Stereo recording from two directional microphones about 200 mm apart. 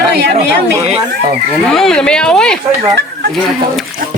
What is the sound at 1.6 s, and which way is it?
Speech, centre (ahead or behind).